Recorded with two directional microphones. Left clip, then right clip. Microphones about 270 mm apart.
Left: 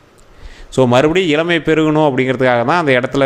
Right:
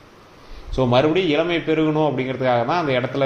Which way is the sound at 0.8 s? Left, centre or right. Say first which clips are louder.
Left 6 dB; left.